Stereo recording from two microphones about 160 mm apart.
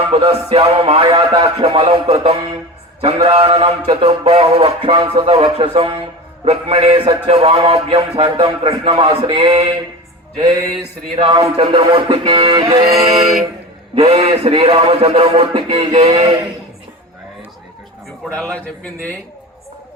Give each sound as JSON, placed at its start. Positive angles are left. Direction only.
{"t": 0.1, "sound": "music", "side_deg": -35}
{"t": 11.2, "sound": "music", "side_deg": -35}
{"t": 12.9, "sound": "a sound", "side_deg": 0}
{"t": 13.9, "sound": "music", "side_deg": -35}
{"t": 18.5, "sound": "a man's voice", "side_deg": 10}